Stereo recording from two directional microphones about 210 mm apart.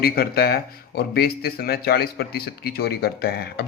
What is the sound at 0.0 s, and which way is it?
Speech, 45° left (ahead or behind).